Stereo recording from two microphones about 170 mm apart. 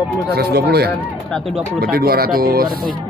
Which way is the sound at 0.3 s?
70° right (ahead or behind).